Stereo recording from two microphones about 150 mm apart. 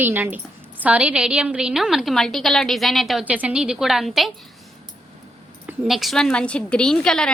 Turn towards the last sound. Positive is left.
turn(degrees=5)  # may be behind; listen again after turning